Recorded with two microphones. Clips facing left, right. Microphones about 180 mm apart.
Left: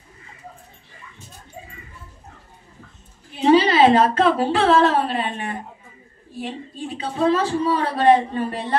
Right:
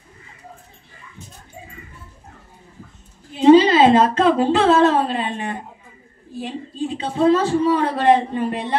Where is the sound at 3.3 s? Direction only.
25° right (ahead or behind).